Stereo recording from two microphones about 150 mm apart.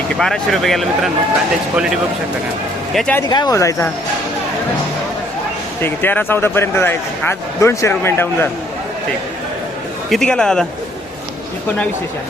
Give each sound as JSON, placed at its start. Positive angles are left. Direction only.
{"t": 0.2, "sound": "speech", "side_deg": 0}
{"t": 3.2, "sound": "speech", "side_deg": 25}
{"t": 5.8, "sound": "a man's voice", "side_deg": 15}
{"t": 10.1, "sound": "speech", "side_deg": 5}